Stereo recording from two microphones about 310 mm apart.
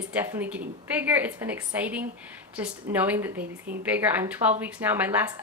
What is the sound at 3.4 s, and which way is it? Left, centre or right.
Speech, right.